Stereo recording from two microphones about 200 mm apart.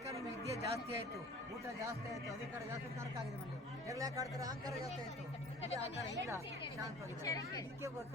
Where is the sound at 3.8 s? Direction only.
15° right (ahead or behind).